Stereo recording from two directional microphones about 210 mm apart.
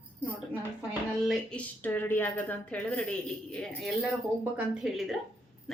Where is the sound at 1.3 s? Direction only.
5° left (ahead or behind).